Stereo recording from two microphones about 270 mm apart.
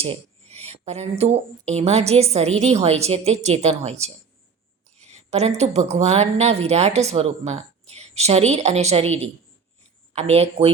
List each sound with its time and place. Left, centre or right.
0.0 s a woman's voice: right